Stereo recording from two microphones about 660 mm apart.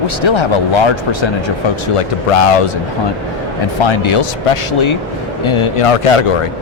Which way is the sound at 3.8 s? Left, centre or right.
Left.